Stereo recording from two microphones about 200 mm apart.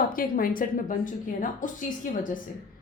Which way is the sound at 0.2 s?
45° left (ahead or behind).